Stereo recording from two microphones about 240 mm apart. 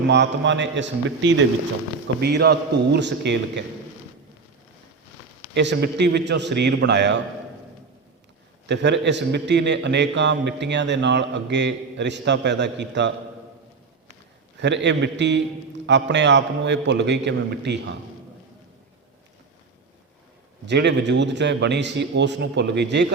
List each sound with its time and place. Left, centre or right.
0.1 s a man's voice: right
5.5 s a man's voice: right
8.6 s a man's voice: right
14.6 s a man's voice: right
20.7 s a man's voice: right